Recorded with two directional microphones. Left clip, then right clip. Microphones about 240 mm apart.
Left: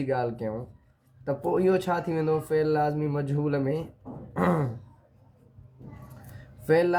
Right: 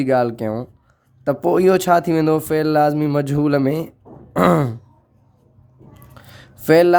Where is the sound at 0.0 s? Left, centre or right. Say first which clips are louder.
Right 11 dB; right.